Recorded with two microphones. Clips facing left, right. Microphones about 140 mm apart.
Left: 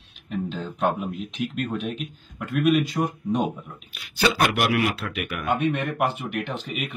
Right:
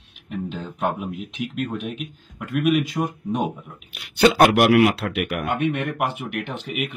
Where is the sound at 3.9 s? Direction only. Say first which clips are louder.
Right 6 dB; 65° right (ahead or behind).